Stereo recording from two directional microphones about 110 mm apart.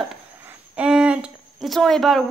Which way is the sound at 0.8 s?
10° right (ahead or behind).